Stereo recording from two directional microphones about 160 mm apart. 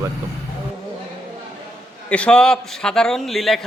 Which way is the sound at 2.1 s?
5° left (ahead or behind).